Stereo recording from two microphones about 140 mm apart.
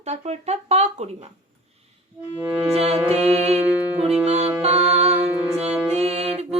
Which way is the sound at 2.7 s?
50° right (ahead or behind).